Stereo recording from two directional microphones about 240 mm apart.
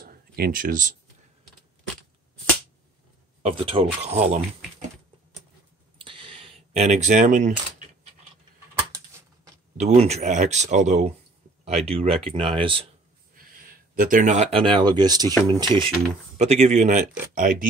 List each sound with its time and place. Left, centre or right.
0.0 s a sound: right
3.4 s speech: right
5.9 s coin: right
9.8 s speech: right
13.4 s speech: right; by 15.9 s centre
16.3 s speech: right